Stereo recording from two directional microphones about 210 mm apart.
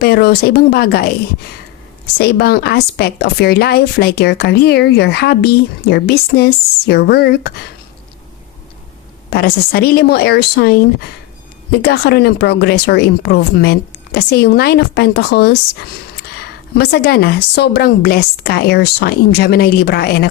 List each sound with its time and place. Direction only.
0.0 s speech: 50° left (ahead or behind)
2.1 s speech: 50° left (ahead or behind)
9.3 s speech: 45° left (ahead or behind)